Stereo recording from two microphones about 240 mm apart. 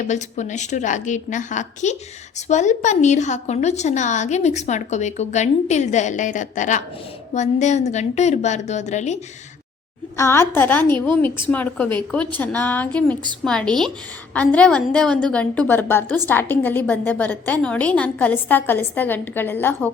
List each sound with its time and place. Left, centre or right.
0.1 s a woman's voice: left
10.2 s a woman's voice: centre